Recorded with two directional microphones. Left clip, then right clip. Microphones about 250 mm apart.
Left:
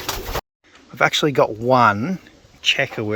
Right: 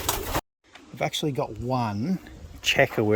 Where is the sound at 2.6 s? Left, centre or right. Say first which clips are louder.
Left 2 dB; centre.